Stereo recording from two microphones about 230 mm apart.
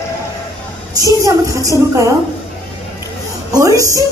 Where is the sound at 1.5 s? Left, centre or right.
Centre.